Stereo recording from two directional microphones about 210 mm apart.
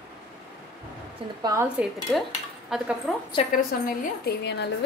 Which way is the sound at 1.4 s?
20° right (ahead or behind).